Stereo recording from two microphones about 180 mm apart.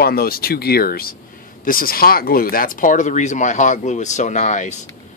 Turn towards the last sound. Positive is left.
turn(degrees=45)  # may be behind; listen again after turning